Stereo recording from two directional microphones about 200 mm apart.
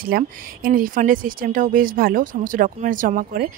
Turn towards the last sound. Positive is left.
turn(degrees=-40)  # may be behind; listen again after turning